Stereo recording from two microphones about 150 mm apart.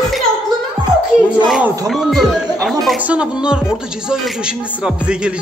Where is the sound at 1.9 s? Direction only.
Centre (ahead or behind).